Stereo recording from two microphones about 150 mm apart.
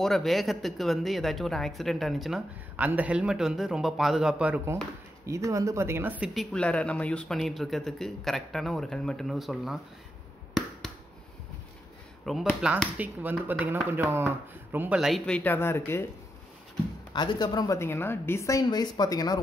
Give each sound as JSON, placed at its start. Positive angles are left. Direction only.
{"t": 0.0, "sound": "speech", "side_deg": 0}
{"t": 5.2, "sound": "speech", "side_deg": -20}
{"t": 6.3, "sound": "speech", "side_deg": 5}
{"t": 12.3, "sound": "speech", "side_deg": 0}
{"t": 15.0, "sound": "speech", "side_deg": 0}
{"t": 17.1, "sound": "a woman's voice", "side_deg": 30}